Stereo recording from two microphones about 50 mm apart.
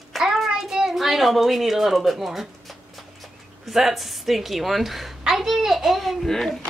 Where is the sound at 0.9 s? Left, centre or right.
Centre.